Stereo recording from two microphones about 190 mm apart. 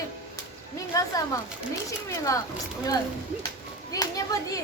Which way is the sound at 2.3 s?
15° left (ahead or behind).